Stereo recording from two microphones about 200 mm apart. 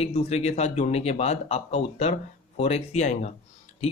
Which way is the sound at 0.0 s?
30° left (ahead or behind).